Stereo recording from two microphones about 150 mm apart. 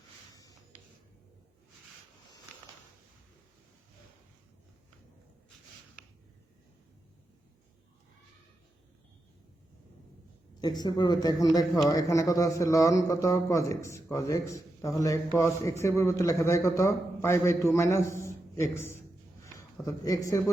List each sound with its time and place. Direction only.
10.5 s a man's voice: 25° left (ahead or behind)